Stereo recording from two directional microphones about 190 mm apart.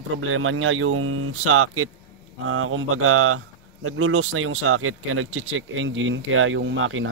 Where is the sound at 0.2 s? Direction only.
90° right.